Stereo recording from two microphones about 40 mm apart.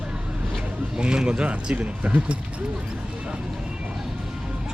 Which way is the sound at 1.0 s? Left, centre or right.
Right.